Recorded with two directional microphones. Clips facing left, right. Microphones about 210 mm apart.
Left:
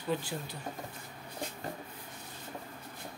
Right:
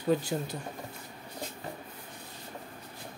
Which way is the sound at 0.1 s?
45° right (ahead or behind).